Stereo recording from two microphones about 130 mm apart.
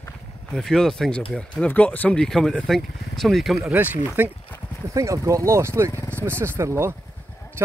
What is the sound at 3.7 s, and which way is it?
Speech, 15° right (ahead or behind).